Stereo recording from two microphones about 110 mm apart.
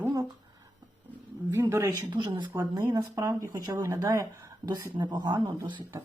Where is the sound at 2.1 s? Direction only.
45° right (ahead or behind).